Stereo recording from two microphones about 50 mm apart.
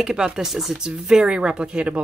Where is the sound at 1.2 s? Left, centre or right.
Right.